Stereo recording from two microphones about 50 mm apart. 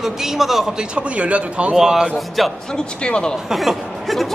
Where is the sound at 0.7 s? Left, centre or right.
Right.